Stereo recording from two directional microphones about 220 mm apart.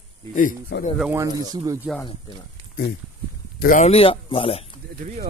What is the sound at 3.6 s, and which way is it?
Speech, 35° left (ahead or behind).